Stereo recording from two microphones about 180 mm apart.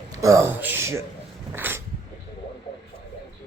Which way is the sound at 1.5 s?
10° right (ahead or behind).